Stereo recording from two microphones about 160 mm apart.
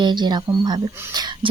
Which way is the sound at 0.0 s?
25° right (ahead or behind).